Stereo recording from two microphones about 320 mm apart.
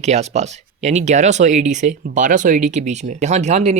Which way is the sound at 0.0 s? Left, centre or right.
Right.